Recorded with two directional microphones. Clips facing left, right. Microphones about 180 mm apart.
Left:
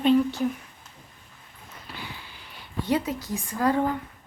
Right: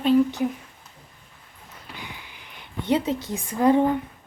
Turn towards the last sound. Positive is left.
turn(degrees=-20)  # may be behind; listen again after turning